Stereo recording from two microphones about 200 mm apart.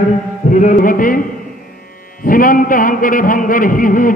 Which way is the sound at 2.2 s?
45° left (ahead or behind).